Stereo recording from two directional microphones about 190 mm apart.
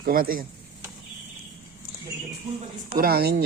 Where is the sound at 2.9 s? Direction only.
50° right (ahead or behind).